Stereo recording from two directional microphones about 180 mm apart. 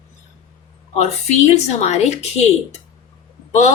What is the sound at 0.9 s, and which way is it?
Speech, 40° left (ahead or behind).